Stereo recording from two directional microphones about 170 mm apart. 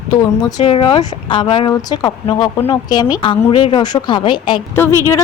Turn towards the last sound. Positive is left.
turn(degrees=15)  # may be behind; listen again after turning